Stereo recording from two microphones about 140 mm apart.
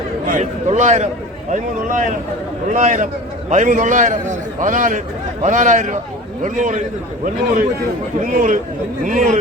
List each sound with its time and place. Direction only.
0.3 s a man's voice: 60° right (ahead or behind)